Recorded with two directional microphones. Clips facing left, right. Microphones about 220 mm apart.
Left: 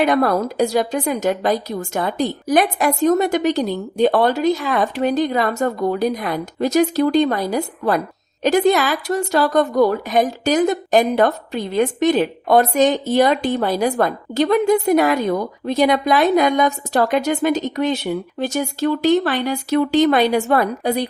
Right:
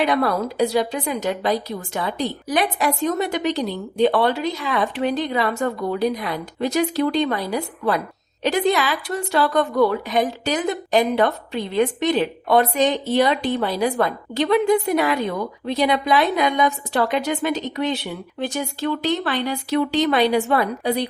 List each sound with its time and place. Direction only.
0.0 s a woman's voice: 45° left (ahead or behind)